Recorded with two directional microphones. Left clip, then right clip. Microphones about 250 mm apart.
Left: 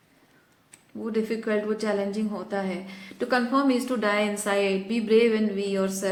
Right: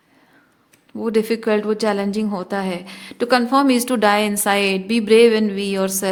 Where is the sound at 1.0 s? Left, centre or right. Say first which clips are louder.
Right 9 dB; right.